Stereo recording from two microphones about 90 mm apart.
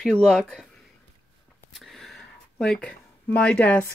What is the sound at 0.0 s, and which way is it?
Speech, 10° left (ahead or behind).